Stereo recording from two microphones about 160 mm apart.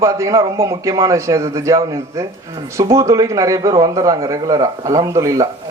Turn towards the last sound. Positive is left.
turn(degrees=-20)  # may be behind; listen again after turning